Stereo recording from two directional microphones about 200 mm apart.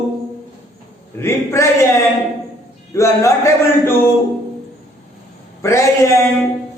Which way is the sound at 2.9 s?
15° left (ahead or behind).